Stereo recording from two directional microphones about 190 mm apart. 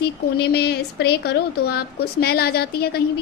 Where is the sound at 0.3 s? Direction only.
60° left (ahead or behind).